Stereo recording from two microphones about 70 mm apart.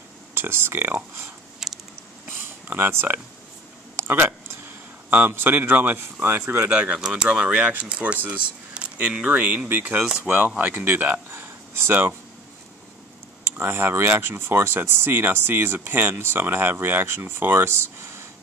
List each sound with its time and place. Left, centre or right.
0.3 s speech: right
1.6 s a sound: centre
2.2 s a sound: right
5.1 s a man's voice: right
6.7 s a man's voice: centre
13.4 s speech: right